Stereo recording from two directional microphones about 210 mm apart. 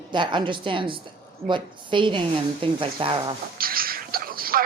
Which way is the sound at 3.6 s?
45° right (ahead or behind).